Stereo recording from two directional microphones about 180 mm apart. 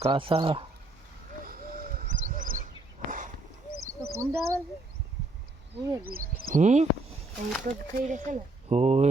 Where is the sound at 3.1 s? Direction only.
45° right (ahead or behind).